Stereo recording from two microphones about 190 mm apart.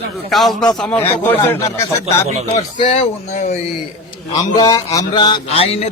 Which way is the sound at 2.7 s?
25° left (ahead or behind).